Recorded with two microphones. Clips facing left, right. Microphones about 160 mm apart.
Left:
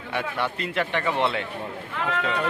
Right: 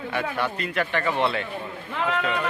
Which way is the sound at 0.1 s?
20° left (ahead or behind).